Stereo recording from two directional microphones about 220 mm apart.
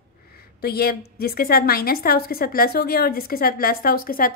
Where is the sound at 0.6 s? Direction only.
45° left (ahead or behind).